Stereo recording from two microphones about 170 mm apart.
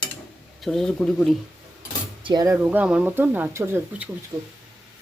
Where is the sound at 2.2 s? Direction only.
25° right (ahead or behind).